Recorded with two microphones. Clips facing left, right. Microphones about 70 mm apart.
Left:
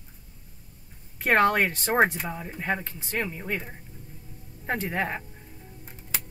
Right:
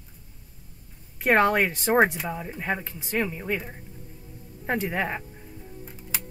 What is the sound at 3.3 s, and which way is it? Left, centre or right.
Speech, centre.